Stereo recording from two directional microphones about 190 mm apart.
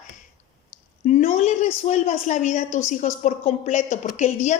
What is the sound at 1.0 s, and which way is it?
A woman's voice, 40° left (ahead or behind).